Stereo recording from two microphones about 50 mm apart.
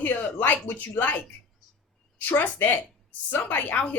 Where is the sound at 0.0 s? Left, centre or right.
Left.